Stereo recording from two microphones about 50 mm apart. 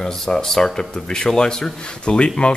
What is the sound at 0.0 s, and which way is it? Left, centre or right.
A man's voice, centre.